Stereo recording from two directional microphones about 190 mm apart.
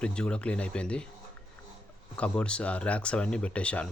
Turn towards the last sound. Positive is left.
turn(degrees=5)  # may be behind; listen again after turning